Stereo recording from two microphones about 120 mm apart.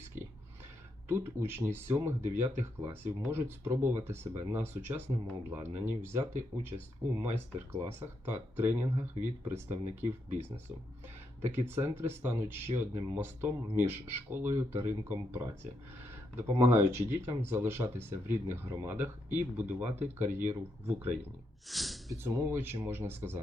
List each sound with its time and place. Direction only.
0.1 s a sound: 15° right (ahead or behind)
1.0 s speech: 20° right (ahead or behind)
11.4 s speech: 20° right (ahead or behind)
21.7 s speech: centre (ahead or behind)
22.1 s speech: 30° right (ahead or behind)